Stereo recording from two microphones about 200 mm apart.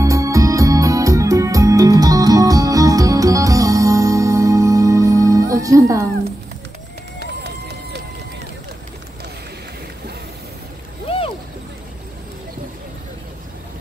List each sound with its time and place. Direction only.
0.0 s music: 15° right (ahead or behind)
7.2 s run: 55° right (ahead or behind)
11.1 s boat: 25° left (ahead or behind)